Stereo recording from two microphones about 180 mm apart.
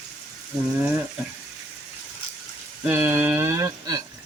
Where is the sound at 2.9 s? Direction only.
10° right (ahead or behind).